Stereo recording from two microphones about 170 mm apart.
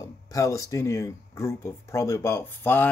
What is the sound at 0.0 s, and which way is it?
Speech, 15° left (ahead or behind).